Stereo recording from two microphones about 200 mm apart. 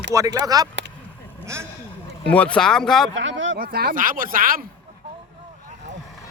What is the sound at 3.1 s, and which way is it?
Speech, 65° right (ahead or behind).